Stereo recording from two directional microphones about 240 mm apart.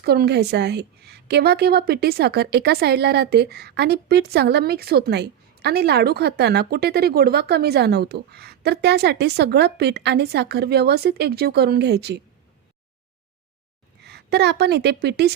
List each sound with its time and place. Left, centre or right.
0.0 s a woman's voice: right
14.0 s a woman's voice: right